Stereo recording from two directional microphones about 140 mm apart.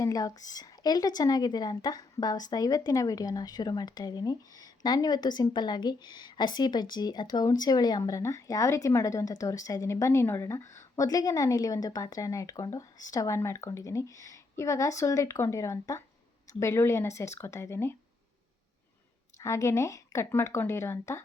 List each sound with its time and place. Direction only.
0.0 s speech: 25° left (ahead or behind)
19.4 s speech: 20° left (ahead or behind)